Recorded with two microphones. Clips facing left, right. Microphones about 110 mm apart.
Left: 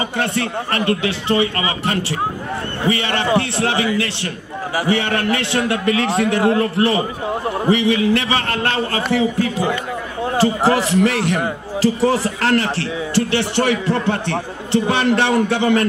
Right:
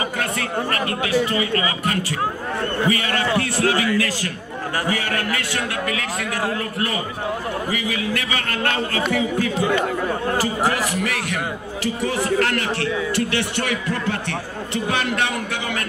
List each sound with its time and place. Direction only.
0.2 s a man's voice: 30° left (ahead or behind)